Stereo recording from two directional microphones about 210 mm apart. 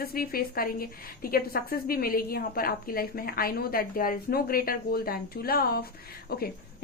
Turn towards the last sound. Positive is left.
turn(degrees=45)  # may be behind; listen again after turning